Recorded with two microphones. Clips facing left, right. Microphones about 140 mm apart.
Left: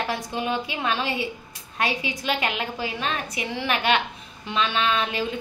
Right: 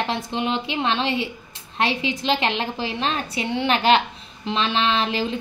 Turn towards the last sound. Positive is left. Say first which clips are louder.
# right 2 dB
turn(degrees=-30)  # may be behind; listen again after turning